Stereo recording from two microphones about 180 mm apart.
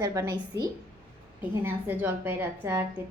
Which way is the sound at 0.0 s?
15° right (ahead or behind).